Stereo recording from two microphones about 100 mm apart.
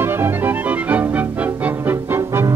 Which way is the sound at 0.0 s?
25° right (ahead or behind).